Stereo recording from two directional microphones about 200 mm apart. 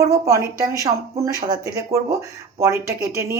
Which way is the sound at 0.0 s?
15° right (ahead or behind).